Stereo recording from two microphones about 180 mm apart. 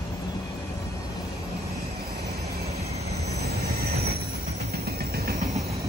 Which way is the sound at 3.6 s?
60° right (ahead or behind).